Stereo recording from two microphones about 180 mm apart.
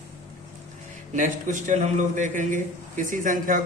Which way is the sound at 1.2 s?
45° right (ahead or behind).